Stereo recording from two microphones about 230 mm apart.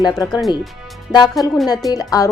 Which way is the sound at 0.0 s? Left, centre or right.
Centre.